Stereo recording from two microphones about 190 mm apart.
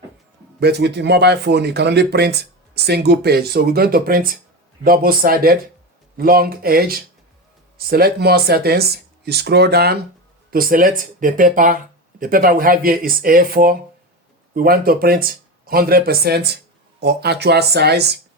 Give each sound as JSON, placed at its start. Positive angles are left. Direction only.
{"t": 0.6, "sound": "speech", "side_deg": -60}